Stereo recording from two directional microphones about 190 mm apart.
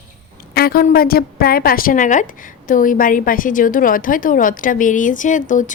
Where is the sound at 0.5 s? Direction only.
50° left (ahead or behind).